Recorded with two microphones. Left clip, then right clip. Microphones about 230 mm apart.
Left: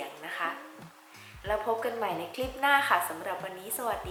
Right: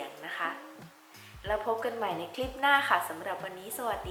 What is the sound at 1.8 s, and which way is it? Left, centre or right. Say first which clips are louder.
A woman's voice: left 1 dB; centre.